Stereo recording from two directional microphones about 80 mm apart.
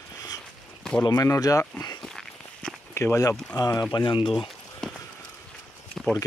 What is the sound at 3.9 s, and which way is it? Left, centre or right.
Speech, left.